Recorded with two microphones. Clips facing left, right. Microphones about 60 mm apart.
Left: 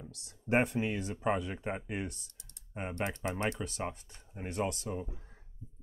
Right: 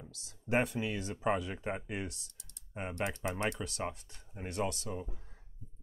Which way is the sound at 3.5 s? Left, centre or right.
Centre.